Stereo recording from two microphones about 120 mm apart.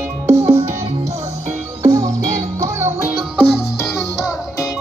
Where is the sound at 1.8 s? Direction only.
30° right (ahead or behind).